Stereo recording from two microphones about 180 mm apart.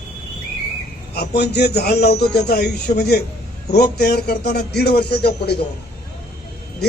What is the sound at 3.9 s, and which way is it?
Speech, 65° left (ahead or behind).